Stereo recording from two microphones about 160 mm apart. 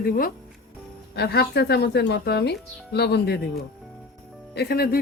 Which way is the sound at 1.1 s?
90° left.